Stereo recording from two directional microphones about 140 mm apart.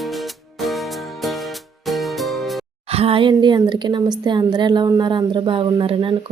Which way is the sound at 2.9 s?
45° right (ahead or behind).